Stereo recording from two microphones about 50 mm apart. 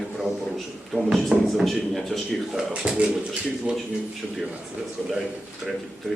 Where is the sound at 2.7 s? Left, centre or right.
Right.